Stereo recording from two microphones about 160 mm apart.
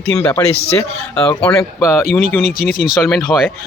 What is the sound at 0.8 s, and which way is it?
Speech, 5° left (ahead or behind).